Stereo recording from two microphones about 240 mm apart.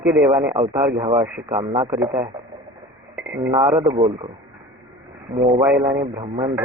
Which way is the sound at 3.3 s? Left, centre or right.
Centre.